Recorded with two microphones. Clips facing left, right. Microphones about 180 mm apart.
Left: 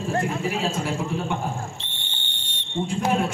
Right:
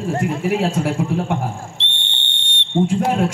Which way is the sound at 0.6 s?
80° right.